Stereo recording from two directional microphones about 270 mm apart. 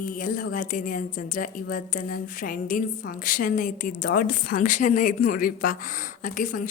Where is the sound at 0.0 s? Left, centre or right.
Left.